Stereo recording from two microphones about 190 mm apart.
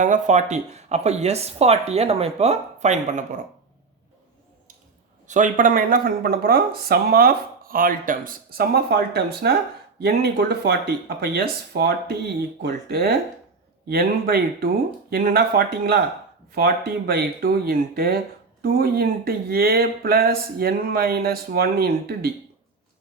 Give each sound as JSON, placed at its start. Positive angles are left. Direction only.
{"t": 0.0, "sound": "speech", "side_deg": -40}
{"t": 5.3, "sound": "speech", "side_deg": -45}